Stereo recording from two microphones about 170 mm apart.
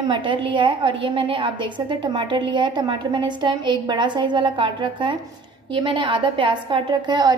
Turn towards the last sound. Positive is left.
turn(degrees=-25)  # may be behind; listen again after turning